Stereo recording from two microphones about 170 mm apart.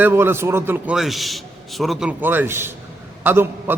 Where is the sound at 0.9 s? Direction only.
Centre (ahead or behind).